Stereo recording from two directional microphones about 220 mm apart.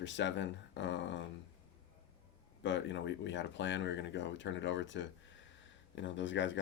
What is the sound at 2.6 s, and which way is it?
Speech, 55° left (ahead or behind).